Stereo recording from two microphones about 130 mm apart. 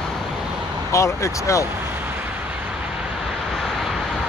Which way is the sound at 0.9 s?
25° left (ahead or behind).